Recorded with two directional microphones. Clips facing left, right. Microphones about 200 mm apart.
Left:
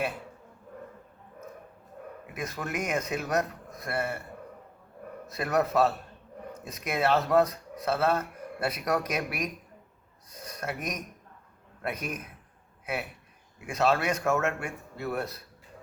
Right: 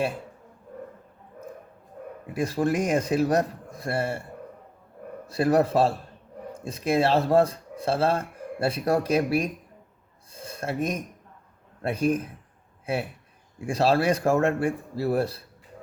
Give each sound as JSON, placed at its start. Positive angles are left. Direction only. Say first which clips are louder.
{"t": 2.2, "sound": "speech", "louder": "right 11 dB", "side_deg": -30}
{"t": 5.2, "sound": "speech", "louder": "right 6 dB", "side_deg": -30}
{"t": 10.3, "sound": "a sound", "louder": "right 6 dB", "side_deg": -30}
{"t": 11.8, "sound": "a man's voice", "louder": "right 10 dB", "side_deg": -30}